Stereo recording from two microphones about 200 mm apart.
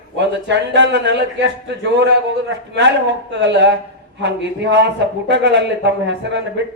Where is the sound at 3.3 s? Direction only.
60° right (ahead or behind).